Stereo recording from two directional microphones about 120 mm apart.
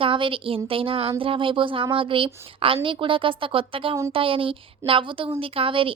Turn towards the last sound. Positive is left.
turn(degrees=-50)  # may be behind; listen again after turning